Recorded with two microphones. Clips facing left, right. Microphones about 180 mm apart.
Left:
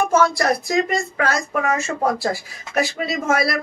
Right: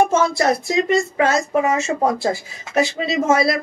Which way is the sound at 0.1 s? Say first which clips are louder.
Even; 25° right (ahead or behind).